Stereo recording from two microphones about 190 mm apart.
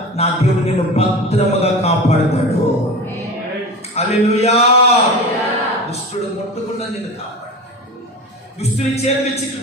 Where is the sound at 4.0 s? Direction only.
35° left (ahead or behind).